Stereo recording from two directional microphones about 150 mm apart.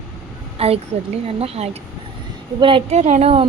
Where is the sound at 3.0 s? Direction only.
50° right (ahead or behind).